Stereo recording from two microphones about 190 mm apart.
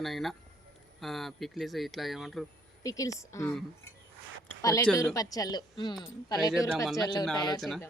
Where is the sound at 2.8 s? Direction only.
15° left (ahead or behind).